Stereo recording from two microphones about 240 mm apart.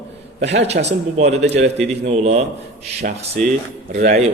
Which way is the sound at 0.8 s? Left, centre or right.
Right.